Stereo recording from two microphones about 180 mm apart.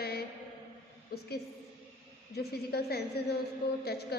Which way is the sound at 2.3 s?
60° left (ahead or behind).